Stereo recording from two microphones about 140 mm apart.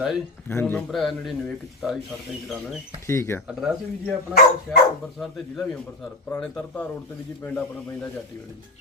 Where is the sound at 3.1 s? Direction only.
20° left (ahead or behind).